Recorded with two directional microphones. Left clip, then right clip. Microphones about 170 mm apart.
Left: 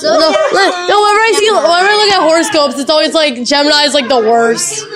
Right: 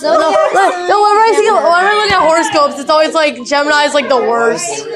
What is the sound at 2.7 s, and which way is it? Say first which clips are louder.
Speech: even; 90° left.